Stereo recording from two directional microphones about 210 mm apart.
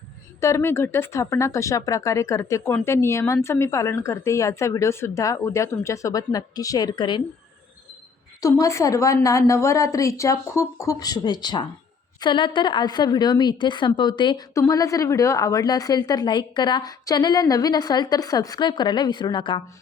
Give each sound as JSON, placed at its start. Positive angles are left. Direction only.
{"t": 0.3, "sound": "speech", "side_deg": 15}
{"t": 8.4, "sound": "a woman's voice", "side_deg": 15}